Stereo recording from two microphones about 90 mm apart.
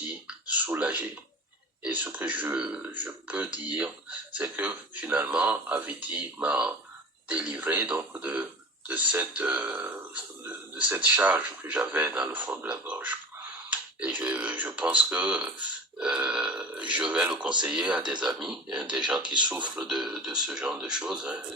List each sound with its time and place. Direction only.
0.3 s a sound: 15° right (ahead or behind)
1.8 s speech: 20° right (ahead or behind)
19.1 s speech: 60° right (ahead or behind)
19.7 s speech: 5° right (ahead or behind)